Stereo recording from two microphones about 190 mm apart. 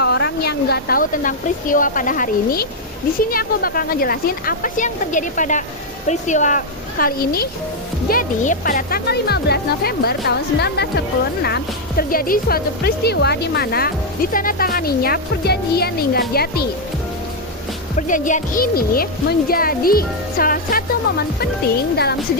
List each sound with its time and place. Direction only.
0.0 s speech: 60° left (ahead or behind); by 6.6 s 40° left (ahead or behind)
7.0 s speech: 50° left (ahead or behind)
17.9 s speech: 40° left (ahead or behind); by 22.2 s 55° left (ahead or behind)